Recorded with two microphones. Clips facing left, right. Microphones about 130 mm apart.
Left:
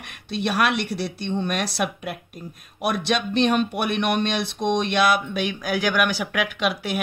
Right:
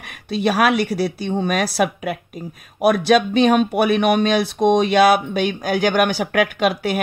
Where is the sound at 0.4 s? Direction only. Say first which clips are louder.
Right 5 dB; 50° right (ahead or behind).